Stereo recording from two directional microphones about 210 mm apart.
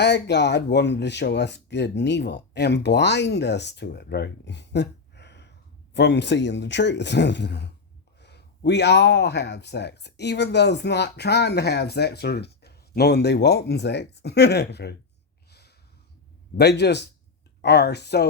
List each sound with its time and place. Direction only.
0.0 s speech: 55° left (ahead or behind)
16.6 s speech: 50° left (ahead or behind)